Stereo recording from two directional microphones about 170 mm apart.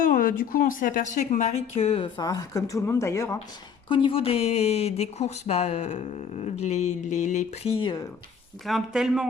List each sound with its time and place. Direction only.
0.0 s speech: 55° left (ahead or behind); by 3.3 s 15° left (ahead or behind)
3.8 s speech: 30° left (ahead or behind)
8.6 s speech: centre (ahead or behind)